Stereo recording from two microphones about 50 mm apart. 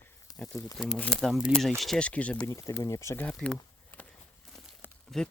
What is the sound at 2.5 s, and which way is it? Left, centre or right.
Speech, left.